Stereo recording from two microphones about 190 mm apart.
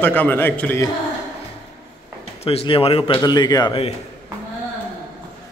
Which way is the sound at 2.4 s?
30° left (ahead or behind).